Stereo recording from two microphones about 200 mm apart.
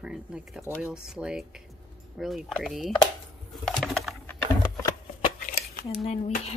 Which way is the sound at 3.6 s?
Centre (ahead or behind).